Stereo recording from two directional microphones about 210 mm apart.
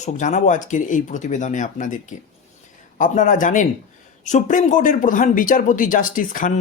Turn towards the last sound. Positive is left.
turn(degrees=40)  # may be behind; listen again after turning